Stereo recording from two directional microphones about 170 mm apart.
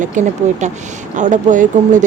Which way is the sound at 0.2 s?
45° right (ahead or behind).